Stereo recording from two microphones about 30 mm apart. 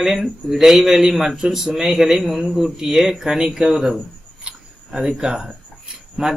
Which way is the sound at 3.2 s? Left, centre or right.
Right.